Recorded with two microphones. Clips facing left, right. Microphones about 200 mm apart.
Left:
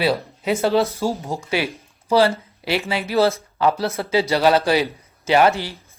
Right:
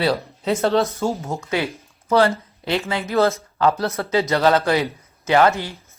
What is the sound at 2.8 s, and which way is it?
Speech, 15° left (ahead or behind).